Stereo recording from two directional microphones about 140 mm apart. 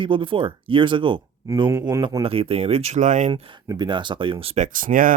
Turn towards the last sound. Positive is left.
turn(degrees=-80)